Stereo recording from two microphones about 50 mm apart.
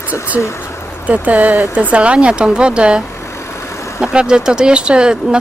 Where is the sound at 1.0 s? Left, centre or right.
Right.